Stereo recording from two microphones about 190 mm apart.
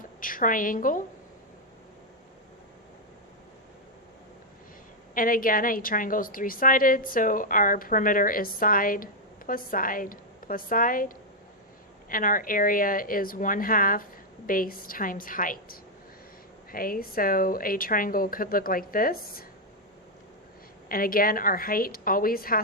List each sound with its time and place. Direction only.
0.2 s a woman's voice: 45° left (ahead or behind)
5.1 s a woman's voice: 45° left (ahead or behind)
20.9 s a woman's voice: 50° left (ahead or behind)